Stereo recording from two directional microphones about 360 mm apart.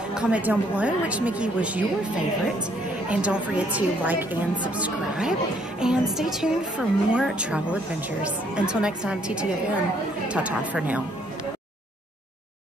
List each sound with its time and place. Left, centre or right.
0.1 s a woman's voice: centre